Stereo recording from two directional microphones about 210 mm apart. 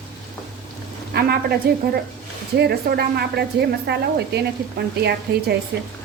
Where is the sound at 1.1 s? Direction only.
50° right (ahead or behind).